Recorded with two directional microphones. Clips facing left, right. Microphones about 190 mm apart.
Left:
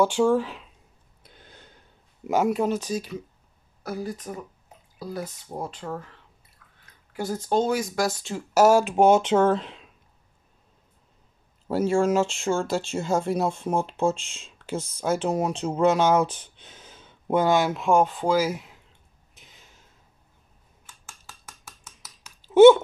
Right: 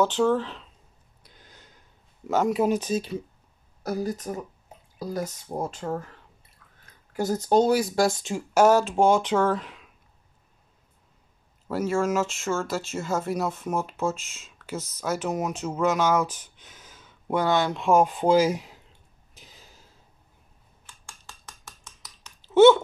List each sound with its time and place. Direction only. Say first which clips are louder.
0.0 s speech: left 2 dB; 10° left (ahead or behind)
2.2 s speech: left 1 dB; 10° left (ahead or behind)
2.5 s speech: right 2 dB; 10° right (ahead or behind)
2.8 s speech: right 2 dB; 25° right (ahead or behind)
3.8 s speech: right 3 dB; 40° right (ahead or behind); by 8.5 s 15° right (ahead or behind)
8.5 s speech: left 1 dB; 10° left (ahead or behind)
11.6 s speech: left 3 dB; 30° left (ahead or behind)
17.5 s speech: right 1 dB; 10° left (ahead or behind)
18.0 s speech: right 3 dB; 20° right (ahead or behind)
19.3 s a sound: right 3 dB; 35° right (ahead or behind)
20.8 s a sound: even; 5° left (ahead or behind)